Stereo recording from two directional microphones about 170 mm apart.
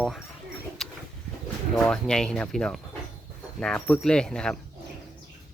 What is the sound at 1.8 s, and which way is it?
Speech, 5° left (ahead or behind).